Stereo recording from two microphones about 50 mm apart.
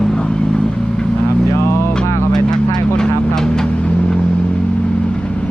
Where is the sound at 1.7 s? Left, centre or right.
Left.